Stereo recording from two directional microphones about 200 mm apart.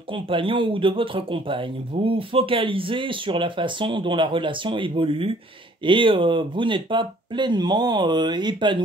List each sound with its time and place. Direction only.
0.1 s speech: 25° right (ahead or behind)